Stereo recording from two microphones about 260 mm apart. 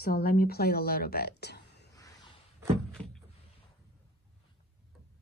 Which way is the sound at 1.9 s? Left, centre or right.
Centre.